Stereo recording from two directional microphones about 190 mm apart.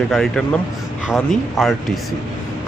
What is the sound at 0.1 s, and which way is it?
Speech, centre (ahead or behind).